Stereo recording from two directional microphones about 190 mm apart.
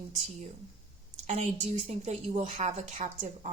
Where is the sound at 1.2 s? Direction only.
35° right (ahead or behind).